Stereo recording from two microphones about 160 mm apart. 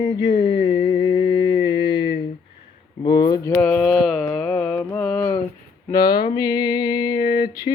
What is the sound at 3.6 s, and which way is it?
Mantra, 10° left (ahead or behind).